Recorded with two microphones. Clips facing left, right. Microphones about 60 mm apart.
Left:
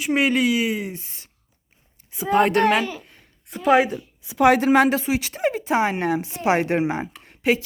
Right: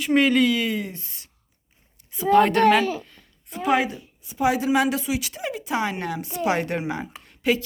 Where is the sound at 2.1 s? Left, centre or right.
Centre.